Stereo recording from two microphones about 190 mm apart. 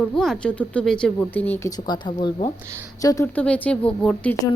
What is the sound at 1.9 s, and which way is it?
Speech, 25° left (ahead or behind).